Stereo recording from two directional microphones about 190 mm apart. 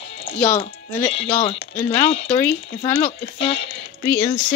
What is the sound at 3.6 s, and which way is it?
Speech, 70° left (ahead or behind).